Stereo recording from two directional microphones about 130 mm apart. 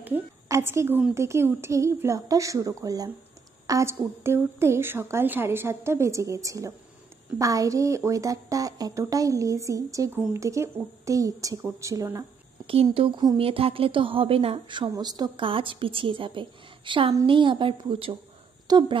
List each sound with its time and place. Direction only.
0.0 s a sound: 20° right (ahead or behind)
1.1 s a woman's voice: 20° right (ahead or behind)
12.9 s a woman's voice: 45° right (ahead or behind)
18.7 s speech: 35° right (ahead or behind)